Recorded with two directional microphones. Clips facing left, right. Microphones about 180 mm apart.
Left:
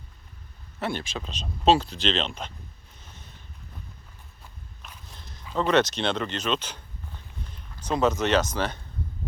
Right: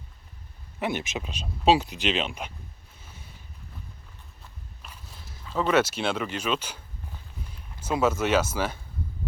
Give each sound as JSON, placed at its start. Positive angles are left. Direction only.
{"t": 0.8, "sound": "speech", "side_deg": -15}
{"t": 3.0, "sound": "a sound", "side_deg": -10}
{"t": 4.8, "sound": "speech", "side_deg": -5}